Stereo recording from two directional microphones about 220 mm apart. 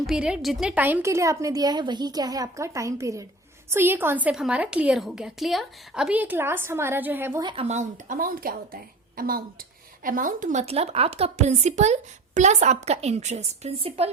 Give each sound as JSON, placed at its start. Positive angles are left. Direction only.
{"t": 0.0, "sound": "a woman's voice", "side_deg": -5}
{"t": 7.4, "sound": "a woman's voice", "side_deg": -25}